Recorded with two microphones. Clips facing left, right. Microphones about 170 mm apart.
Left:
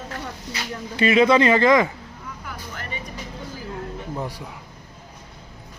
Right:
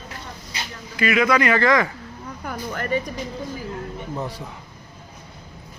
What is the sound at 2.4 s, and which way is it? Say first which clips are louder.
Vehicle: right 9 dB; 45° right (ahead or behind).